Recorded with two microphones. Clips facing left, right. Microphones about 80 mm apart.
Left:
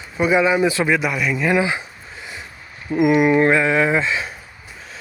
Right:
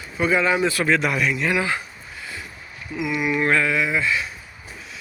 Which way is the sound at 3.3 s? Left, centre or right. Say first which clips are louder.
Left 6 dB; left.